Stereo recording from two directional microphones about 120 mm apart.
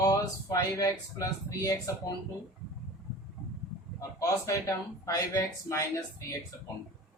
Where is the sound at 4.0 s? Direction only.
25° left (ahead or behind).